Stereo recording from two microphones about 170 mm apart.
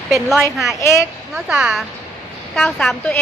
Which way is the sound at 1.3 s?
5° right (ahead or behind).